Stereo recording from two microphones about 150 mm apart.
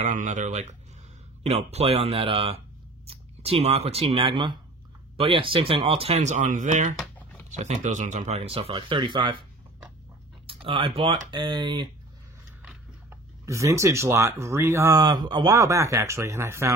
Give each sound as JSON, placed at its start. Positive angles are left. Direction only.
{"t": 0.0, "sound": "a sound", "side_deg": -60}
{"t": 1.4, "sound": "speech", "side_deg": -45}
{"t": 10.4, "sound": "speech", "side_deg": -40}
{"t": 13.5, "sound": "speech", "side_deg": -20}